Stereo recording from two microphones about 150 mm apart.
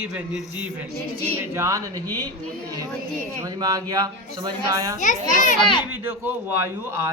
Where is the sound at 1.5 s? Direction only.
20° right (ahead or behind).